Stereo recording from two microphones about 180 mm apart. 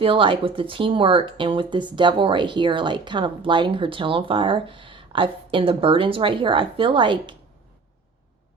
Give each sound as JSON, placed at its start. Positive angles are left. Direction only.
{"t": 0.0, "sound": "speech", "side_deg": -30}